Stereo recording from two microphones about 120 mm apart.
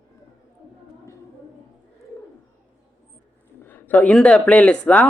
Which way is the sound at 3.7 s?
15° left (ahead or behind).